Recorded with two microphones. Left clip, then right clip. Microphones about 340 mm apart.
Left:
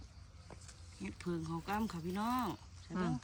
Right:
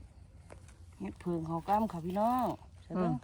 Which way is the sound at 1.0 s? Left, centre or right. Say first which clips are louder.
Right 5 dB; centre.